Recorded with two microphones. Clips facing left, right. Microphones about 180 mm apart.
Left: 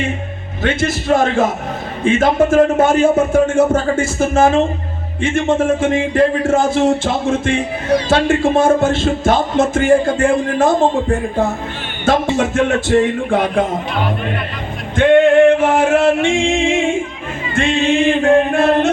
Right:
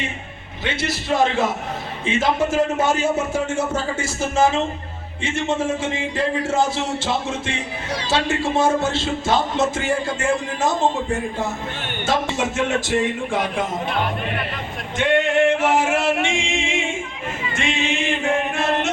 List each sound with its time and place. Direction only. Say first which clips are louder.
0.6 s speech: left 8 dB; 50° left (ahead or behind)
14.9 s male singing: left 9 dB; 55° left (ahead or behind)
17.5 s music: left 9 dB; 55° left (ahead or behind)